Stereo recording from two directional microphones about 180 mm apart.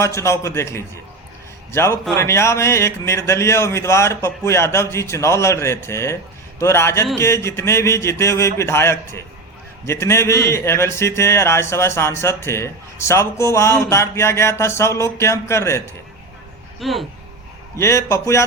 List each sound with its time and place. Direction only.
0.0 s speech: 15° left (ahead or behind)
16.8 s speech: centre (ahead or behind)
17.7 s speech: 15° left (ahead or behind)